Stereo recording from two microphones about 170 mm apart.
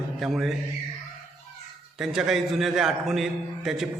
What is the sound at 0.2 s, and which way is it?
Speech, centre (ahead or behind).